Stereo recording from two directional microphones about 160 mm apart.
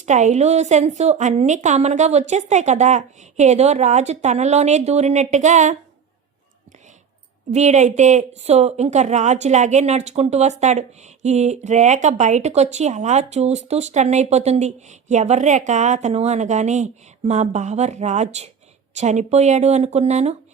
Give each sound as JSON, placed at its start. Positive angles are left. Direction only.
{"t": 0.0, "sound": "a woman's voice", "side_deg": -50}
{"t": 7.5, "sound": "a woman's voice", "side_deg": -45}